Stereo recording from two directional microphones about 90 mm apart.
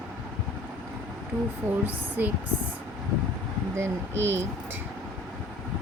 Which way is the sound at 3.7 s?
30° right (ahead or behind).